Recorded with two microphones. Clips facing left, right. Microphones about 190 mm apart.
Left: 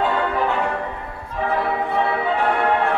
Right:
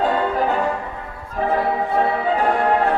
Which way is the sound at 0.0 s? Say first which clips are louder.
Right 1 dB; 40° right (ahead or behind).